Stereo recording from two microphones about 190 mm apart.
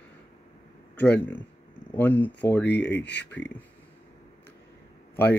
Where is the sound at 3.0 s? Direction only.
65° left (ahead or behind).